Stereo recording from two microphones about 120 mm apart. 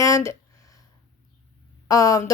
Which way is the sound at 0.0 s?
25° left (ahead or behind).